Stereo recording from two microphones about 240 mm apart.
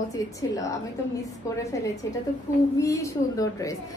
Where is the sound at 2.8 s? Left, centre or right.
Centre.